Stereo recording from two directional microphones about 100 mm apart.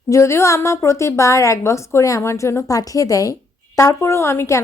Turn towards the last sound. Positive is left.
turn(degrees=25)  # may be behind; listen again after turning